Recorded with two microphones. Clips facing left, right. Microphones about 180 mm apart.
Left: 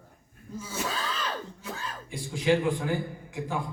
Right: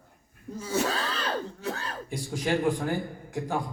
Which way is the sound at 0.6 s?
65° right (ahead or behind).